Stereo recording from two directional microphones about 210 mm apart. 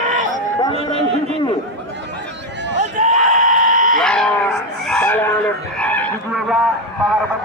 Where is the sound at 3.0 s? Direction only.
40° right (ahead or behind).